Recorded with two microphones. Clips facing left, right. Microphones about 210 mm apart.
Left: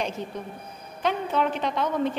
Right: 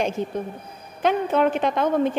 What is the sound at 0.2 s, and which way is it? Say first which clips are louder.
A woman's voice: right 7 dB; 50° right (ahead or behind).